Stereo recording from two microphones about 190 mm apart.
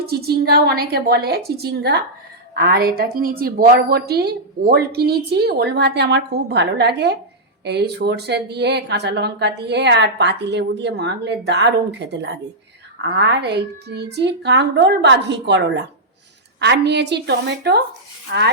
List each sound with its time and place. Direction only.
0.0 s speech: 55° right (ahead or behind)